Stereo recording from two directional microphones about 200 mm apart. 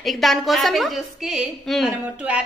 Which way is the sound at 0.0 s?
Centre (ahead or behind).